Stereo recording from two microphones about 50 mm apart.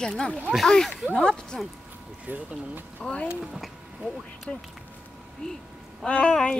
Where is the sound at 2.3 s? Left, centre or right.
Right.